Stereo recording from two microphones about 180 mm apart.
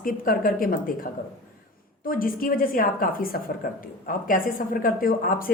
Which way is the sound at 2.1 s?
50° left (ahead or behind).